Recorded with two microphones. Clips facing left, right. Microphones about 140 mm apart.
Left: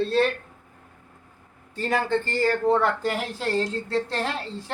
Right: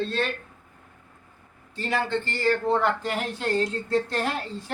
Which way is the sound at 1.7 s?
45° left (ahead or behind).